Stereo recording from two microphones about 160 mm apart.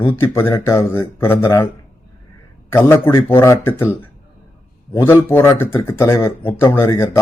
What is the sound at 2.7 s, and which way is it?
Speech, 15° left (ahead or behind).